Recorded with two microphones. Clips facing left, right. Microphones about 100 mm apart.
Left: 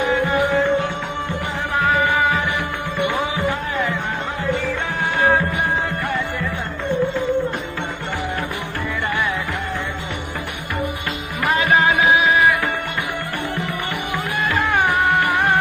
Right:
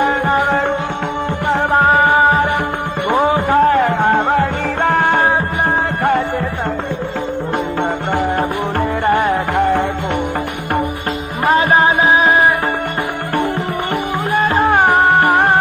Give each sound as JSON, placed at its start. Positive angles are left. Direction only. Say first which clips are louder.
{"t": 0.0, "sound": "music", "louder": "right 4 dB", "side_deg": -60}
{"t": 1.8, "sound": "music", "louder": "right 4 dB", "side_deg": -40}
{"t": 9.0, "sound": "music", "louder": "right 8 dB", "side_deg": -50}
{"t": 11.4, "sound": "music", "louder": "right 5 dB", "side_deg": -35}
{"t": 14.5, "sound": "music", "louder": "right 6 dB", "side_deg": -40}